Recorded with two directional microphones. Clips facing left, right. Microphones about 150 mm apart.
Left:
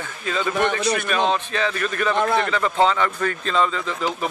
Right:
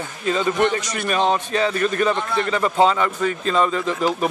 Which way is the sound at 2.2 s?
50° left (ahead or behind).